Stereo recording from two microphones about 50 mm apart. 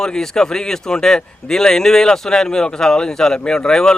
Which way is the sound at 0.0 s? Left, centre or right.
Centre.